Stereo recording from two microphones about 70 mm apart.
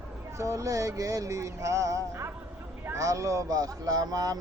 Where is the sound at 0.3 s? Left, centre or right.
Right.